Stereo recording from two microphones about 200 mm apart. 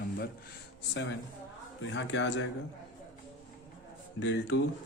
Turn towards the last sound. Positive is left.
turn(degrees=65)  # may be behind; listen again after turning